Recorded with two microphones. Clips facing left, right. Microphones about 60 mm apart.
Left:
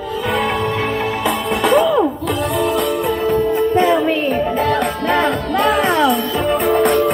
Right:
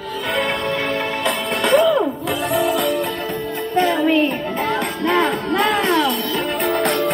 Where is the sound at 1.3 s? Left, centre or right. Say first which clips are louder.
Left 1 dB; centre.